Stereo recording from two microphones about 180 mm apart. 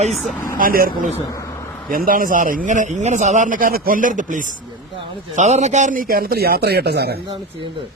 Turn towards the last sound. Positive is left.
turn(degrees=-65)  # may be behind; listen again after turning